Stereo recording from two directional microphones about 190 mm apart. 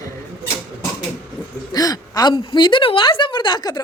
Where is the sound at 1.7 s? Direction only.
20° left (ahead or behind).